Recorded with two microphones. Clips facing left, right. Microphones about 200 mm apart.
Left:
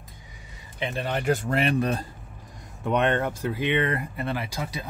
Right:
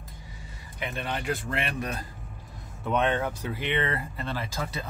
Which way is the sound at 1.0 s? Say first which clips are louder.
Left 7 dB; 45° left (ahead or behind).